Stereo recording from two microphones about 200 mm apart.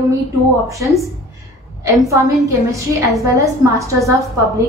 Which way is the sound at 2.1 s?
15° right (ahead or behind).